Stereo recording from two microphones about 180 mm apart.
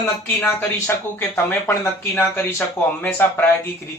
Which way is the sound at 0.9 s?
10° left (ahead or behind).